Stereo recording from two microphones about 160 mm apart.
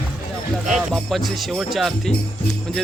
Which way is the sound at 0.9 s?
Centre (ahead or behind).